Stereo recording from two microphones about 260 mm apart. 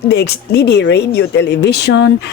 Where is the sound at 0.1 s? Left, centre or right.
Left.